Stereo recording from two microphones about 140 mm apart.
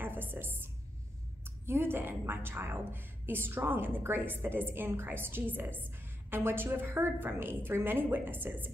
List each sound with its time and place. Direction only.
0.0 s a woman's voice: 15° right (ahead or behind)